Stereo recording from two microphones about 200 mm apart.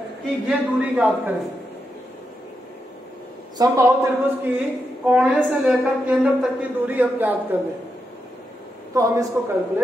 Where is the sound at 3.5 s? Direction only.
15° right (ahead or behind).